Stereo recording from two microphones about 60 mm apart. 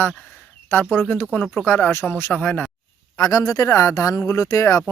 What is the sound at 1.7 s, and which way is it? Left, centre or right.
Speech, left.